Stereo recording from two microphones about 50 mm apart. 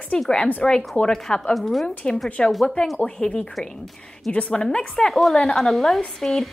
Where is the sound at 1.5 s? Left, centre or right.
Centre.